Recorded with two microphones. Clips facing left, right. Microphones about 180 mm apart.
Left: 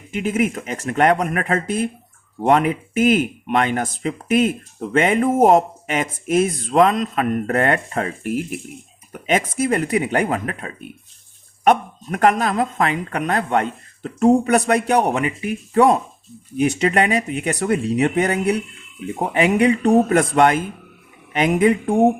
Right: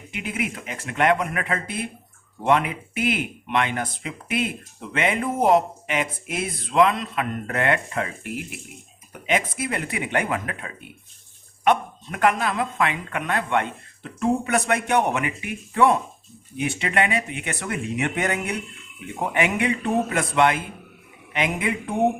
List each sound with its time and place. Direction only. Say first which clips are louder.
0.1 s speech: left 9 dB; 45° left (ahead or behind)